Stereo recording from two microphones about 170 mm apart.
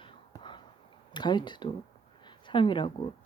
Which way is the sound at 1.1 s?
25° left (ahead or behind).